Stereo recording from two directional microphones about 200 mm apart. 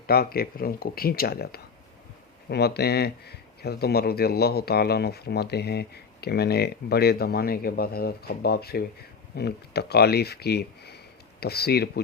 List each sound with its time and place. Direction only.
0.1 s speech: 50° left (ahead or behind)